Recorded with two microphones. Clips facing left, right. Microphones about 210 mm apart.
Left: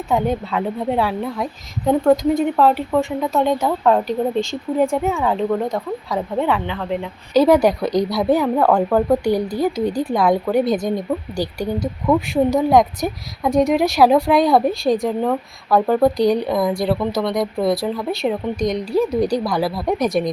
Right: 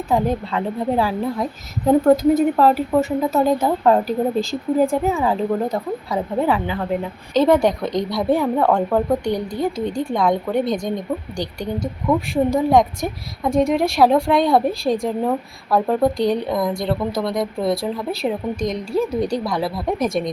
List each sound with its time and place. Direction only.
0.1 s speech: centre (ahead or behind)